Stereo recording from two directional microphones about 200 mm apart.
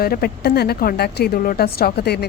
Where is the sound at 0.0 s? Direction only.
50° left (ahead or behind).